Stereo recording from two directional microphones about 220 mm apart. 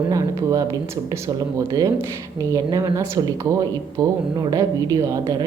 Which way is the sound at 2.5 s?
15° right (ahead or behind).